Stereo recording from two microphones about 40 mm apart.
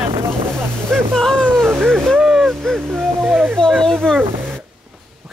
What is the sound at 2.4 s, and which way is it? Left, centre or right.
Owl, centre.